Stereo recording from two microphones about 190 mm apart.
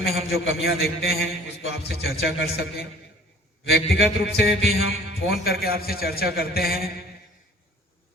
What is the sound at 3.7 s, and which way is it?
A man's voice, 60° left (ahead or behind).